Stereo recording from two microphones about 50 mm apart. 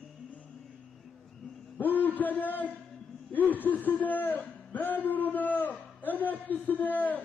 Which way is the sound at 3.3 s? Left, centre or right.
Left.